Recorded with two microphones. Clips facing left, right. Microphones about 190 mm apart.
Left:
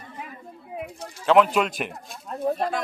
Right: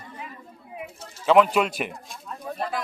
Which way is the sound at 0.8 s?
Centre (ahead or behind).